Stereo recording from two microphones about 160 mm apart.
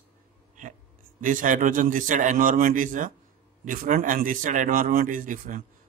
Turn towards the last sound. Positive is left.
turn(degrees=-55)  # may be behind; listen again after turning